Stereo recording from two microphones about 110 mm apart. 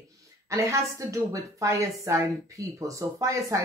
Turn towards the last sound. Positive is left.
turn(degrees=-30)  # may be behind; listen again after turning